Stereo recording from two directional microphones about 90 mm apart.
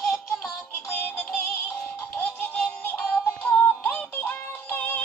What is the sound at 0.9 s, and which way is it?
Synthetic singing, 20° left (ahead or behind).